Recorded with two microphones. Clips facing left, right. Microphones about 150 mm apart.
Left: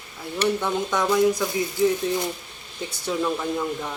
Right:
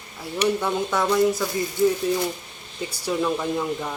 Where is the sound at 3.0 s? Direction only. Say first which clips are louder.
Right 1 dB; 5° right (ahead or behind).